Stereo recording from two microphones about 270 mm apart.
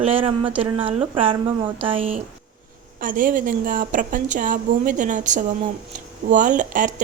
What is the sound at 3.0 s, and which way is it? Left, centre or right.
Speech, right.